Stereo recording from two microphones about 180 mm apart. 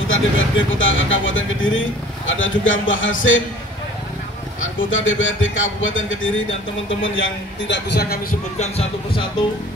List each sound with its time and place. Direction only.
0.1 s speech: 90° left
4.7 s a man's voice: 90° left; by 8.2 s 70° left (ahead or behind)
8.5 s speech: 30° left (ahead or behind)